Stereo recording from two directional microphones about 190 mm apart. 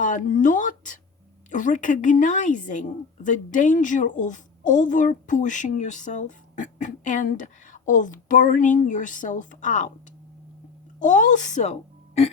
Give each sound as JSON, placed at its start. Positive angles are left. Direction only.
{"t": 0.0, "sound": "a woman's voice", "side_deg": 40}
{"t": 11.0, "sound": "a woman's voice", "side_deg": 40}